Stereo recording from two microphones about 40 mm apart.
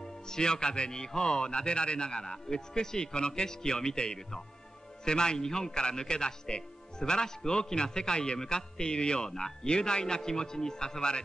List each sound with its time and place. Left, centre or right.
0.3 s a man's voice: centre